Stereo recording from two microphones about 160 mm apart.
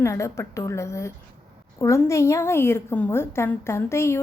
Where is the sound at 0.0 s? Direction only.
15° left (ahead or behind).